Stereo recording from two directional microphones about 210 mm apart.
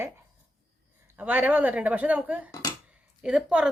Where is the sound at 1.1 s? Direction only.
10° right (ahead or behind).